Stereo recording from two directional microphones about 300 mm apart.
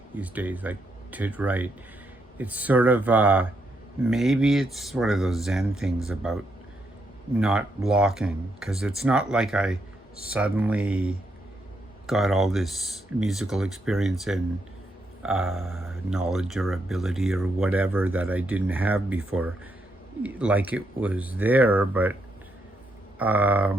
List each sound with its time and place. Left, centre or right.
0.2 s speech: centre
23.1 s speech: centre